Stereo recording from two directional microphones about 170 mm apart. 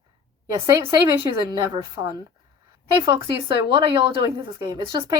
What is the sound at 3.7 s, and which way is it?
Speech, 30° right (ahead or behind).